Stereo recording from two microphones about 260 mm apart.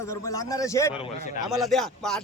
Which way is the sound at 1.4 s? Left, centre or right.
Centre.